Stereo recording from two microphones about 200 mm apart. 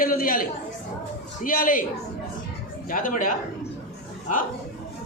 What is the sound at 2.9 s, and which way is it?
Speech, 45° left (ahead or behind).